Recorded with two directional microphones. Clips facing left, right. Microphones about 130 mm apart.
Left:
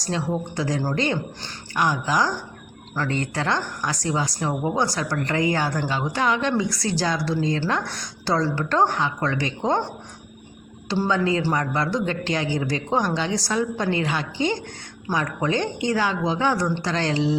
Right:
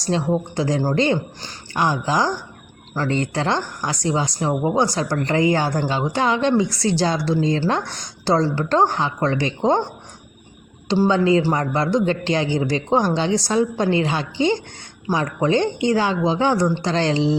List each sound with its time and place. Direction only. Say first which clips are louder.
0.0 s a man's voice: right 5 dB; 25° right (ahead or behind)
11.1 s a man's voice: right 3 dB; 25° right (ahead or behind)